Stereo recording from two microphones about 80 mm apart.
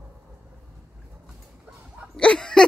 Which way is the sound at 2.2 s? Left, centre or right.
Centre.